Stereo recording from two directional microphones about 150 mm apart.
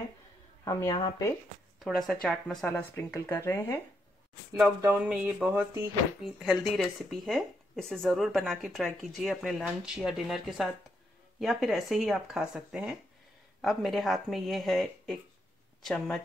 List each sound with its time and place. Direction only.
0.7 s a woman's voice: 25° left (ahead or behind)
1.8 s speech: centre (ahead or behind)
2.7 s speech: 15° left (ahead or behind)
4.8 s speech: 10° right (ahead or behind)